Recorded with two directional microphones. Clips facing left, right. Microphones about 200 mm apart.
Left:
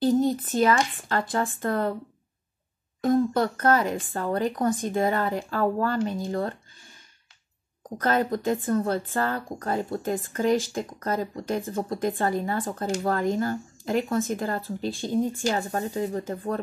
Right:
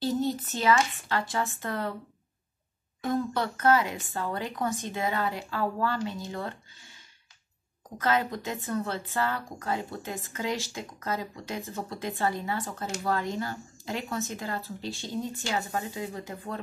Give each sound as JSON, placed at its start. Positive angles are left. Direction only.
{"t": 0.0, "sound": "a sound", "side_deg": 50}
{"t": 0.7, "sound": "speech", "side_deg": 45}
{"t": 3.0, "sound": "speech", "side_deg": 45}
{"t": 8.0, "sound": "speech", "side_deg": 45}